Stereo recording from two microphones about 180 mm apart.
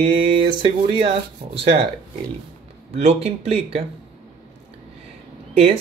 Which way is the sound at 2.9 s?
35° right (ahead or behind).